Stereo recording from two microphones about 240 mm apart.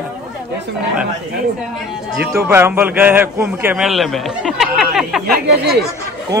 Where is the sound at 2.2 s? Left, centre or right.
Centre.